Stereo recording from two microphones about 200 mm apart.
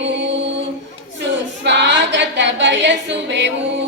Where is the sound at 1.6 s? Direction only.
60° right (ahead or behind).